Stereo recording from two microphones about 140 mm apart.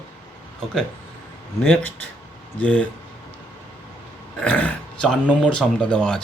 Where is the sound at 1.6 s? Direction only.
10° left (ahead or behind).